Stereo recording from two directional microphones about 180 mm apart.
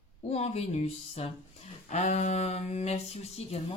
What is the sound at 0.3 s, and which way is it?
Speech, 35° left (ahead or behind).